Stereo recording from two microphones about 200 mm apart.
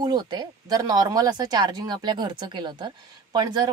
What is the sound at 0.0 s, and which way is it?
A woman's voice, 20° right (ahead or behind).